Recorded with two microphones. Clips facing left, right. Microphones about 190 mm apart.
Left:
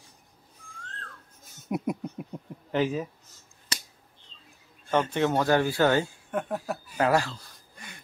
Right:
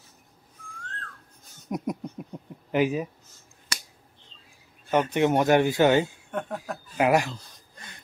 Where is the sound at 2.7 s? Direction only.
10° right (ahead or behind).